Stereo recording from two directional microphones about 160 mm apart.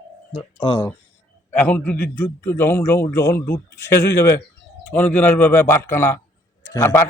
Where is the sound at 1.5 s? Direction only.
10° left (ahead or behind).